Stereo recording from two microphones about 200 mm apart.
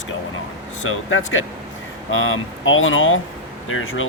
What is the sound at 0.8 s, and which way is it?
Speech, 80° left.